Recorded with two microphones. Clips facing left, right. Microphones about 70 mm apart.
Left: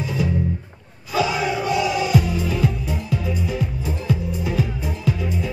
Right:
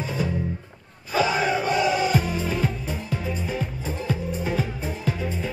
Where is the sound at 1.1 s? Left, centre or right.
Right.